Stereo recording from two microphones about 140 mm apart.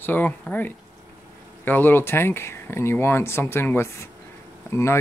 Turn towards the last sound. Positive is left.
turn(degrees=20)  # may be behind; listen again after turning